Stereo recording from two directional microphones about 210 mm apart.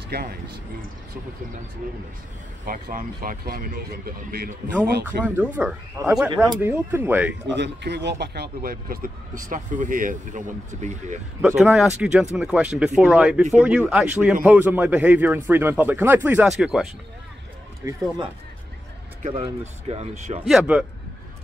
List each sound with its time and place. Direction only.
0.1 s speech: 50° right (ahead or behind)
2.6 s speech: 40° right (ahead or behind)
5.2 s speech: 10° right (ahead or behind)
6.0 s speech: 15° right (ahead or behind)
7.5 s speech: 55° right (ahead or behind); by 11.1 s 35° right (ahead or behind)
11.4 s speech: centre (ahead or behind)
17.8 s speech: 15° right (ahead or behind)
19.2 s speech: 30° right (ahead or behind)
20.4 s speech: 5° right (ahead or behind)